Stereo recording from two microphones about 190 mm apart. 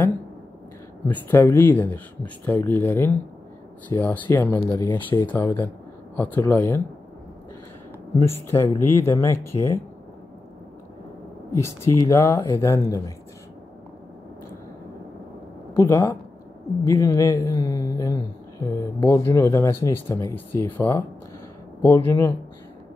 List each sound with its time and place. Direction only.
1.0 s speech: 10° left (ahead or behind)
4.6 s speech: 20° left (ahead or behind)
4.8 s speech: 10° left (ahead or behind)
8.7 s speech: 15° left (ahead or behind)
11.6 s speech: 15° left (ahead or behind)
15.7 s speech: 15° left (ahead or behind)